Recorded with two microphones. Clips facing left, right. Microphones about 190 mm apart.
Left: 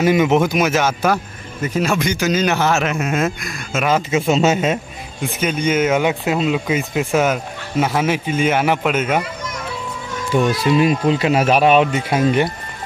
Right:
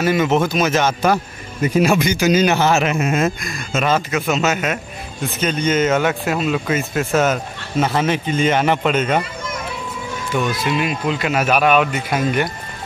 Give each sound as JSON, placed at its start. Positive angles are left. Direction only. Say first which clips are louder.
{"t": 0.0, "sound": "speech", "louder": "left 2 dB", "side_deg": 15}
{"t": 1.6, "sound": "speech", "louder": "right 3 dB", "side_deg": -10}
{"t": 4.1, "sound": "speech", "louder": "left 3 dB", "side_deg": 30}
{"t": 5.2, "sound": "speech", "louder": "even", "side_deg": 10}
{"t": 10.3, "sound": "speech", "louder": "left 5 dB", "side_deg": 35}